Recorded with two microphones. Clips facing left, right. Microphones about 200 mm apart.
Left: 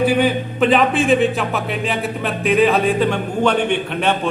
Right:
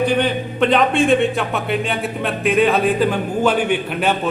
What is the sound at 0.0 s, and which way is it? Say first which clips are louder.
A man's voice: left 2 dB; 5° left (ahead or behind).